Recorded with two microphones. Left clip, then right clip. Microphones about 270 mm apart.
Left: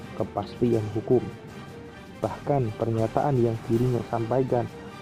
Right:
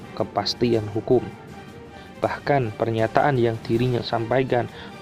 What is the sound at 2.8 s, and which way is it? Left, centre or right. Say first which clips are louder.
Speech: right 6 dB; right.